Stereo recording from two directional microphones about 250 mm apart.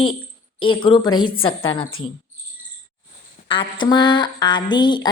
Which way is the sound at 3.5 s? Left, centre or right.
Centre.